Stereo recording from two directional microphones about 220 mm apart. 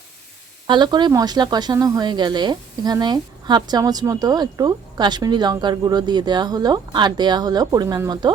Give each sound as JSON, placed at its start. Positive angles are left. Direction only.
{"t": 0.7, "sound": "speech", "side_deg": -20}